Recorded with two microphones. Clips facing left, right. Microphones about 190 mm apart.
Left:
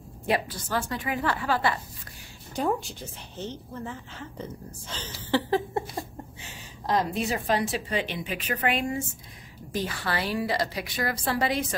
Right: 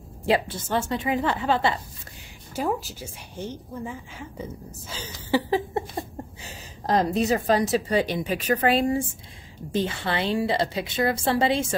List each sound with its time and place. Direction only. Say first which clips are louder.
0.3 s a woman's voice: right 4 dB; 25° right (ahead or behind)
2.5 s a woman's voice: even; 5° right (ahead or behind)
6.4 s a woman's voice: right 2 dB; 40° right (ahead or behind)